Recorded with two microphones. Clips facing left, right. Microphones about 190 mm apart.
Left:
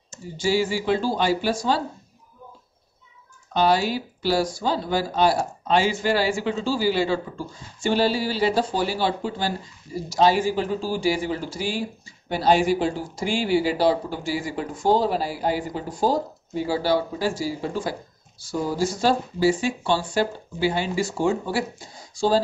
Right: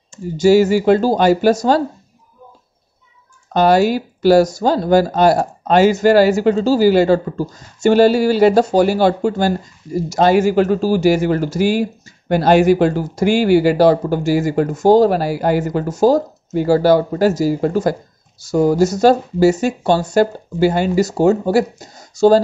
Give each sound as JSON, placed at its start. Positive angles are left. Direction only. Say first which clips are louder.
{"t": 0.4, "sound": "speech", "louder": "right 11 dB", "side_deg": -45}
{"t": 3.5, "sound": "speech", "louder": "right 8 dB", "side_deg": -45}
{"t": 10.5, "sound": "speech", "louder": "right 10 dB", "side_deg": -70}
{"t": 11.0, "sound": "speech", "louder": "right 8 dB", "side_deg": -45}
{"t": 11.2, "sound": "speech", "louder": "right 10 dB", "side_deg": -75}
{"t": 11.5, "sound": "speech", "louder": "right 11 dB", "side_deg": -45}
{"t": 12.4, "sound": "speech", "louder": "right 8 dB", "side_deg": -65}
{"t": 12.9, "sound": "speech", "louder": "right 9 dB", "side_deg": -40}
{"t": 13.2, "sound": "speech", "louder": "right 10 dB", "side_deg": -70}
{"t": 13.7, "sound": "speech", "louder": "right 9 dB", "side_deg": -45}
{"t": 15.0, "sound": "speech", "louder": "right 8 dB", "side_deg": -70}
{"t": 15.9, "sound": "speech", "louder": "right 9 dB", "side_deg": -45}